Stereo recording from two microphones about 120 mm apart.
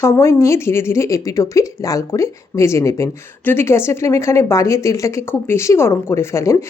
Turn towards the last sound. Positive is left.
turn(degrees=25)  # may be behind; listen again after turning